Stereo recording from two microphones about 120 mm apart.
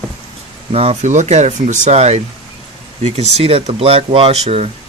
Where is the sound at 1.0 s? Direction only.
85° right; by 4.7 s 55° right (ahead or behind).